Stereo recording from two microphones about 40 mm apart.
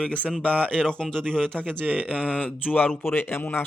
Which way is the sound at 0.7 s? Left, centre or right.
Centre.